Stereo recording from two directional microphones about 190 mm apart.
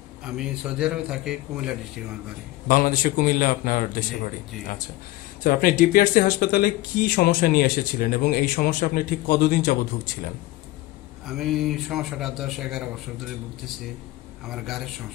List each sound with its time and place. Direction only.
0.2 s a man's voice: 5° right (ahead or behind)
2.7 s speech: 50° left (ahead or behind)
11.2 s a man's voice: centre (ahead or behind)
14.4 s a man's voice: centre (ahead or behind)